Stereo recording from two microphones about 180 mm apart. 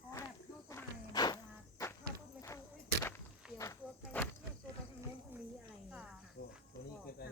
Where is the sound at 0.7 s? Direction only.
20° left (ahead or behind).